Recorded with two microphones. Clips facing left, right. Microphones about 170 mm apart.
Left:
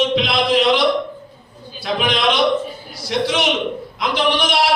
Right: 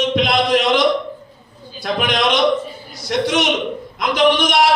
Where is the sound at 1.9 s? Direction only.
55° right (ahead or behind).